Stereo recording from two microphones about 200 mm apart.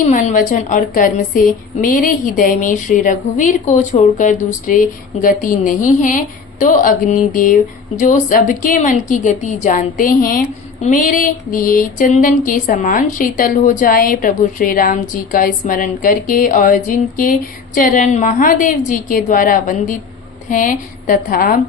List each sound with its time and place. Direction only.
0.0 s a woman's voice: 40° left (ahead or behind)